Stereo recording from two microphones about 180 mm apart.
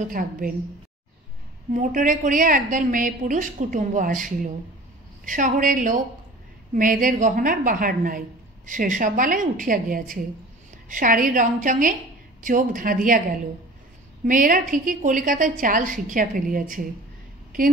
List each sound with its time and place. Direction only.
0.1 s a woman's voice: 50° right (ahead or behind)
1.7 s a woman's voice: 45° right (ahead or behind)
14.2 s a woman's voice: 50° right (ahead or behind)